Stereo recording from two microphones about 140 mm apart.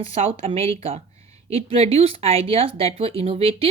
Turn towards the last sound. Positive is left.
turn(degrees=-45)  # may be behind; listen again after turning